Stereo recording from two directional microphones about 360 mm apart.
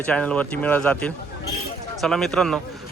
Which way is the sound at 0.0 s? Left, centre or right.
Centre.